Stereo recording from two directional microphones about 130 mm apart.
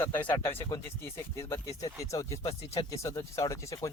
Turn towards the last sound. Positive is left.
turn(degrees=25)  # may be behind; listen again after turning